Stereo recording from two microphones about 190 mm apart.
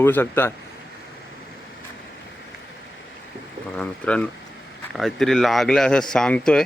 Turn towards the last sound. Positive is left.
turn(degrees=5)  # may be behind; listen again after turning